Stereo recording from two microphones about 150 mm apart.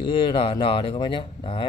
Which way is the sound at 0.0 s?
35° left (ahead or behind).